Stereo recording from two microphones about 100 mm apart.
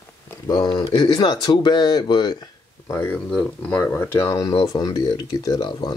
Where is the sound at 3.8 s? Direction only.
20° left (ahead or behind).